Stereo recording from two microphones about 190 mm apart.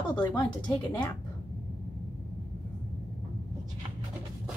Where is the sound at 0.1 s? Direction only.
20° left (ahead or behind).